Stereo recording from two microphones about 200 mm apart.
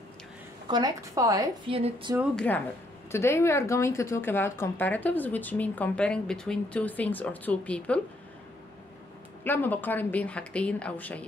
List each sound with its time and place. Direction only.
0.7 s a woman's voice: 20° right (ahead or behind)
1.8 s a sound: 30° right (ahead or behind)
2.3 s speech: 10° left (ahead or behind)
9.4 s speech: 10° left (ahead or behind)